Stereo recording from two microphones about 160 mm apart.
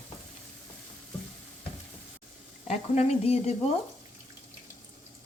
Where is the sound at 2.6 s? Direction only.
45° left (ahead or behind).